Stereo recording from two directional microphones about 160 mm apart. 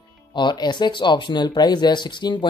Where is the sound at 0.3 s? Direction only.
30° left (ahead or behind).